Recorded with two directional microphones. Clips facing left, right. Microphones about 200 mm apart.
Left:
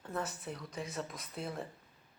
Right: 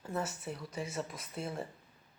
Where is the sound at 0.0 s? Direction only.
5° right (ahead or behind).